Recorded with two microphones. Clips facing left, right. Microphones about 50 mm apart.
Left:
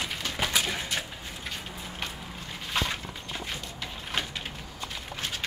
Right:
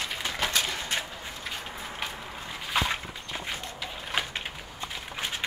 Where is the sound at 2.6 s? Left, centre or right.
Centre.